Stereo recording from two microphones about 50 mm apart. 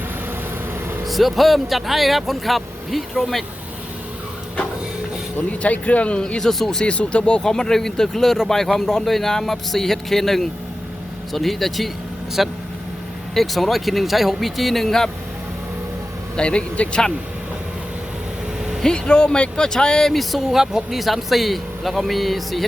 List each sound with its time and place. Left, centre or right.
1.0 s speech: centre
5.5 s speech: left
6.4 s speech: centre
6.8 s speech: left
16.4 s speech: left
18.8 s speech: centre
20.1 s speech: centre